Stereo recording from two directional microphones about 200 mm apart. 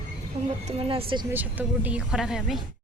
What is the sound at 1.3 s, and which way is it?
Speech, 10° right (ahead or behind).